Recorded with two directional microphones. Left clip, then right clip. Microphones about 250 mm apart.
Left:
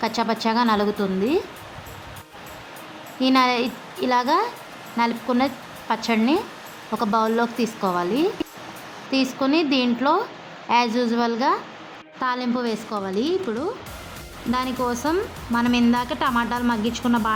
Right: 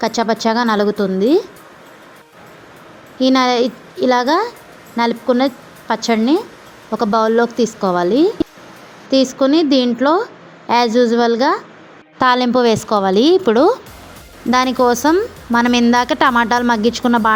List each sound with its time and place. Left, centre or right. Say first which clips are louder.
0.0 s a woman's voice: right 6 dB; centre
3.2 s a woman's voice: right 6 dB; centre
12.2 s a woman's voice: right 12 dB; right